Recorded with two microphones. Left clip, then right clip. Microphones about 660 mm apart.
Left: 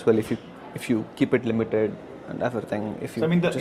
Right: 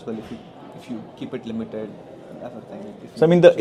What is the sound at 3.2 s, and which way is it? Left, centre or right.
Speech, right.